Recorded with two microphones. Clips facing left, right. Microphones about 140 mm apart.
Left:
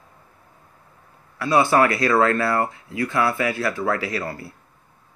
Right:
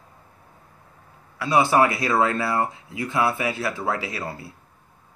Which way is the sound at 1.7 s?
20° right (ahead or behind).